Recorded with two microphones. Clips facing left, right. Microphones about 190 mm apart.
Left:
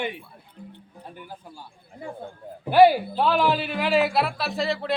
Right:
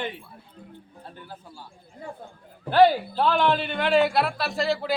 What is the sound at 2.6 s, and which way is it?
Speech, 10° left (ahead or behind).